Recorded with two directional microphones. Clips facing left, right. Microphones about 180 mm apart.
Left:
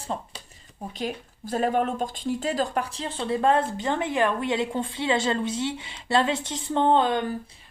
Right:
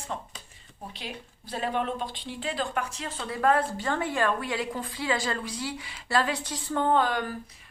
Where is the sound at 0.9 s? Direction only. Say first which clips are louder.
Left 11 dB; 45° left (ahead or behind).